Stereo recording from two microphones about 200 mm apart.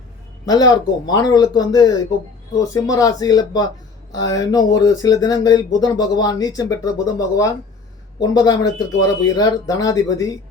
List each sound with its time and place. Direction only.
0.4 s speech: 20° left (ahead or behind)